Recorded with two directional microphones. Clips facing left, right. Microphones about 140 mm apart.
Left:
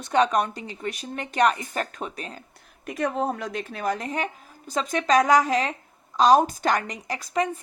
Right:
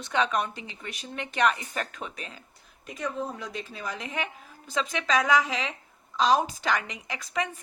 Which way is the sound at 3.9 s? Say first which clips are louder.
Left 5 dB; 40° left (ahead or behind).